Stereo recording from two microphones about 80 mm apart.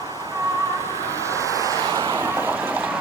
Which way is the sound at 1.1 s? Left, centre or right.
Right.